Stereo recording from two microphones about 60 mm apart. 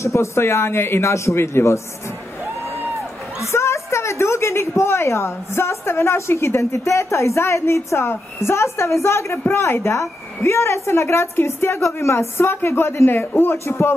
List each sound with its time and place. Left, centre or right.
0.0 s a woman's voice: left
3.3 s a woman's voice: left